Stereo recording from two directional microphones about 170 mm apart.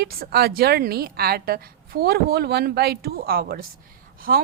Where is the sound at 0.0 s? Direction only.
65° right (ahead or behind).